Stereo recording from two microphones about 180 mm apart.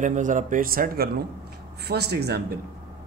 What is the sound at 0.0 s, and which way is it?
A man's voice, 45° right (ahead or behind).